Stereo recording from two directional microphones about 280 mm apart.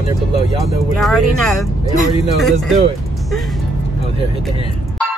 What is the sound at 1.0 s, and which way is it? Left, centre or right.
Speech, centre.